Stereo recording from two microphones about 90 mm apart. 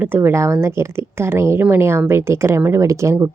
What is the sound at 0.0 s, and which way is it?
Speech, 25° right (ahead or behind).